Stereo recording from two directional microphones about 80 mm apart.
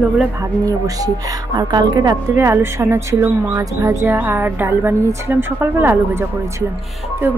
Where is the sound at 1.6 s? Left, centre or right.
Right.